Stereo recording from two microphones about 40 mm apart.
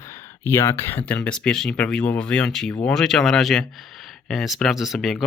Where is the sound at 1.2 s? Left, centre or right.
Left.